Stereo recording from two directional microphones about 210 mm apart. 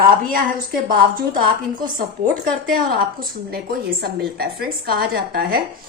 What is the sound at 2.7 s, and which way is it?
Speech, 45° right (ahead or behind).